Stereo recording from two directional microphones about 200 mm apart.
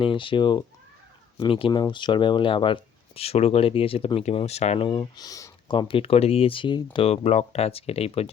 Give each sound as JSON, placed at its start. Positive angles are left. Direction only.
{"t": 0.0, "sound": "speech", "side_deg": 25}